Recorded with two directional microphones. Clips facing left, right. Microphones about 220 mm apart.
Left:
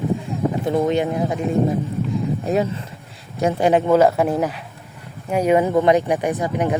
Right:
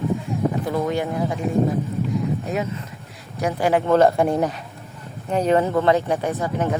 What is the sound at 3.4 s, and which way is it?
Speech, 25° left (ahead or behind).